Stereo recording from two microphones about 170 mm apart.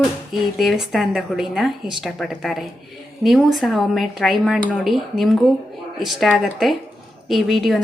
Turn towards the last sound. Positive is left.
turn(degrees=0)  # may be behind; listen again after turning